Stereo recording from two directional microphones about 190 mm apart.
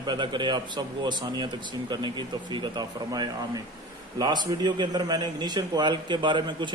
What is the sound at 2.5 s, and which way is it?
A man's voice, 20° right (ahead or behind).